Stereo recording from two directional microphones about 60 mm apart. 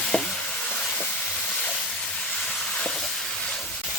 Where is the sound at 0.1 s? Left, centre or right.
Centre.